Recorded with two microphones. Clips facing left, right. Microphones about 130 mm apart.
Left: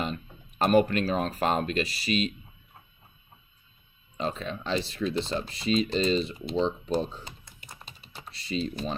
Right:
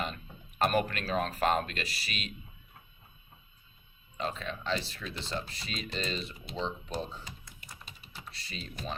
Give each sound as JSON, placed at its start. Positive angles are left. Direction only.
{"t": 0.6, "sound": "speech", "side_deg": 25}
{"t": 4.2, "sound": "speech", "side_deg": 25}